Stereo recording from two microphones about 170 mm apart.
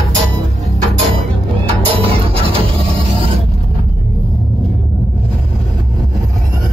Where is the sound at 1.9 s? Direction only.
35° right (ahead or behind).